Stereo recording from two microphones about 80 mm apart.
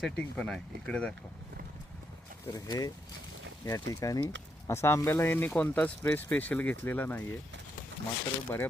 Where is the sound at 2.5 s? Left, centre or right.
Left.